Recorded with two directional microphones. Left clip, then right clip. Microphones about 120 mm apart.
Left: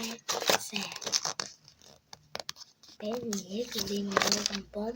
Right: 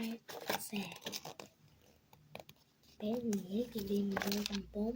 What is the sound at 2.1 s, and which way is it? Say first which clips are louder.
Patter: left 11 dB; 40° left (ahead or behind).